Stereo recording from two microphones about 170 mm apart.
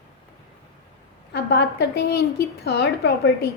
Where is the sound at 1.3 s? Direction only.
85° left.